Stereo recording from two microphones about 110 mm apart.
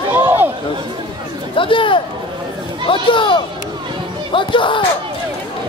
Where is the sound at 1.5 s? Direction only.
50° left (ahead or behind).